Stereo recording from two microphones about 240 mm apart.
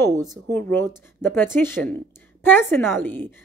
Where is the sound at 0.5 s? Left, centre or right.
Centre.